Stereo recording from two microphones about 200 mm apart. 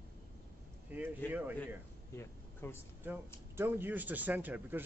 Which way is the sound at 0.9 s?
10° right (ahead or behind).